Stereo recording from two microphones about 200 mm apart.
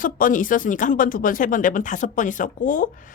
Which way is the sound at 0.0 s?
45° left (ahead or behind).